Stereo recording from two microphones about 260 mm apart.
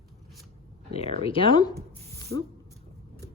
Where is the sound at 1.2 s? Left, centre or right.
Left.